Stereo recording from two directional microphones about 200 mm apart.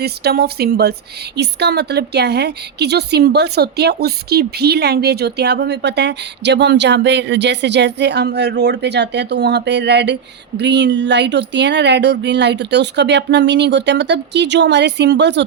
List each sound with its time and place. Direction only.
0.0 s a woman's voice: 55° right (ahead or behind)